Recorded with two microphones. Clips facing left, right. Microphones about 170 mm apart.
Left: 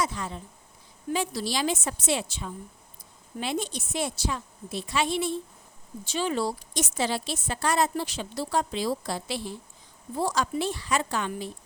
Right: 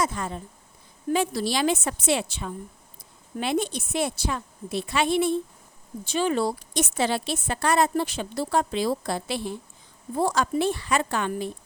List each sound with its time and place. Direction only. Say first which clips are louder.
0.0 s a woman's voice: right 3 dB; 50° right (ahead or behind)